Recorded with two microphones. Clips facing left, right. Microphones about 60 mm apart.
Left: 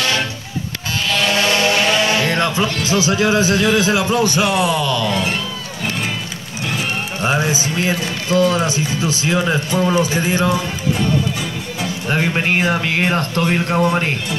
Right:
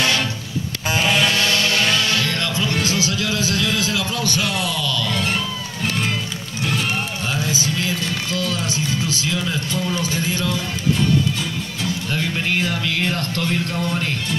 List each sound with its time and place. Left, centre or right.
1.3 s music: left
2.8 s a man's voice: left
6.6 s music: centre
7.2 s music: left
8.0 s a man's voice: left
12.1 s speech: left